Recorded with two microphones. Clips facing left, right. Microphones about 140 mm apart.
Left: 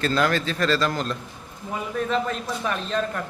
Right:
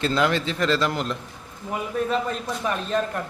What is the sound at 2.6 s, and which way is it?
Speech, 10° right (ahead or behind).